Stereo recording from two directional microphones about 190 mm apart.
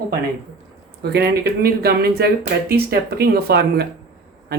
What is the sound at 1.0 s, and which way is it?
Speech, 60° right (ahead or behind).